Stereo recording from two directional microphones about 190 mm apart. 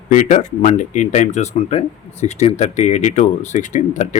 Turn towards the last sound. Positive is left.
turn(degrees=40)  # may be behind; listen again after turning